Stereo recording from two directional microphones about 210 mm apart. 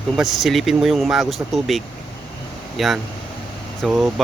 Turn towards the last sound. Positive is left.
turn(degrees=0)  # may be behind; listen again after turning